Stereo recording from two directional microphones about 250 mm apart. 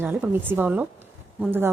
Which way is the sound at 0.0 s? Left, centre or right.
Centre.